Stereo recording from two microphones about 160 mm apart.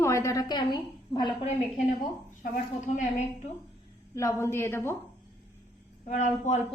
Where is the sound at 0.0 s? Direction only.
20° left (ahead or behind).